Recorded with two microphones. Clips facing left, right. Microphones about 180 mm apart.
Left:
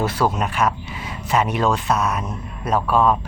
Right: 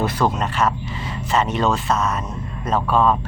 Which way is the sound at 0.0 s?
10° left (ahead or behind).